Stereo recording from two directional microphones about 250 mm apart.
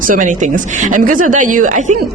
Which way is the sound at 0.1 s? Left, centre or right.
Right.